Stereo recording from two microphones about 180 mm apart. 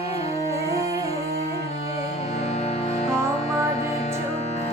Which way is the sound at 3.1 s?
15° right (ahead or behind).